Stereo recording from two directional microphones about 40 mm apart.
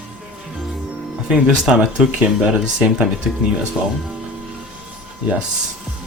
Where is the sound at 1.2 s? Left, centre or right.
Right.